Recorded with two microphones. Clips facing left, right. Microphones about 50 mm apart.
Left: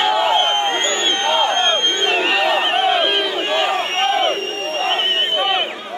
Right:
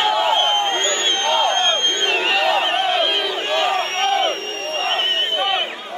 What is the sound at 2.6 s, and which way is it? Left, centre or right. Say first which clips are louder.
Crowd: left 2 dB; centre.